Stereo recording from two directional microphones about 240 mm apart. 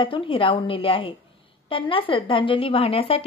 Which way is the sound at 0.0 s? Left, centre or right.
Left.